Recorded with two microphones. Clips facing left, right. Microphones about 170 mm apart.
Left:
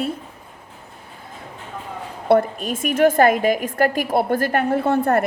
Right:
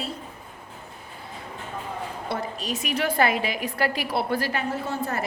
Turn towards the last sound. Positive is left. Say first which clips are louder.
# left 11 dB
turn(degrees=60)  # may be behind; listen again after turning